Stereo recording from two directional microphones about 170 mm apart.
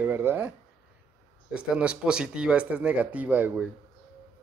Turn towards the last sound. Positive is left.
turn(degrees=-10)  # may be behind; listen again after turning